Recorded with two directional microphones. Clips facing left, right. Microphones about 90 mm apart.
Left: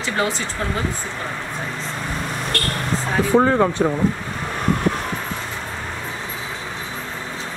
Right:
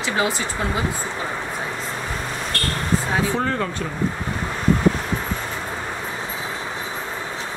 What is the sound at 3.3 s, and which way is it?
Speech, 20° left (ahead or behind).